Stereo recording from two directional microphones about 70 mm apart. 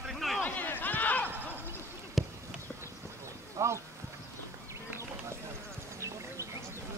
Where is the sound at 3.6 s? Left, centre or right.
Right.